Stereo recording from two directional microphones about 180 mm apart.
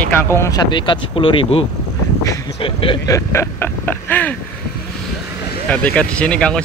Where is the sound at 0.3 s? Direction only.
15° left (ahead or behind).